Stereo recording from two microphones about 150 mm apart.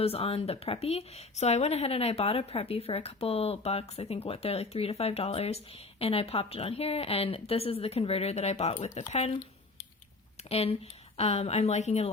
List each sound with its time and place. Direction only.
0.0 s speech: 40° left (ahead or behind)
10.5 s a woman's voice: 45° left (ahead or behind)